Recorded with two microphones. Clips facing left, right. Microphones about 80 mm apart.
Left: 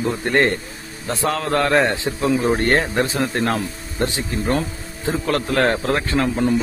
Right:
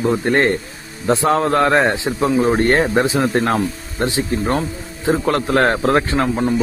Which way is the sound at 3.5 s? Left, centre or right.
Right.